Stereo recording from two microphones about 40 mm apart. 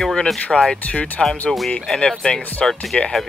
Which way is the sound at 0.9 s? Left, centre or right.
Left.